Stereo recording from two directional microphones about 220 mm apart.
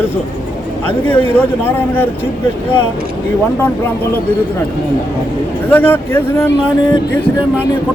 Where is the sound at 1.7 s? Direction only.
10° left (ahead or behind).